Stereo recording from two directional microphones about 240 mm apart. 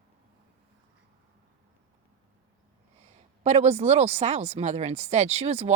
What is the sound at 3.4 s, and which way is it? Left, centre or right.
Speech, right.